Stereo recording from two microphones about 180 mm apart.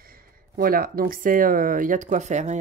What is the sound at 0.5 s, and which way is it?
Speech, 55° right (ahead or behind).